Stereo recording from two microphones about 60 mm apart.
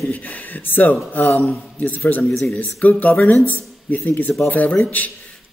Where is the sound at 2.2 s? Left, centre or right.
Centre.